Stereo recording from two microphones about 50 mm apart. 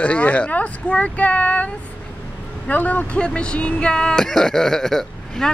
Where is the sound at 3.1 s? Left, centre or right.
Left.